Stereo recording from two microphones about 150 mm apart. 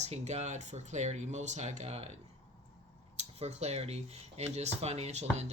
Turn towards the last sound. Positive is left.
turn(degrees=-45)  # may be behind; listen again after turning